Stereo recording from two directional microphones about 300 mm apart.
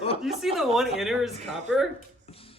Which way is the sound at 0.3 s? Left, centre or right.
Centre.